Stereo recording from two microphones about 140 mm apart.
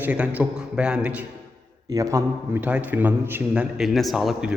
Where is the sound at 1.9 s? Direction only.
20° right (ahead or behind).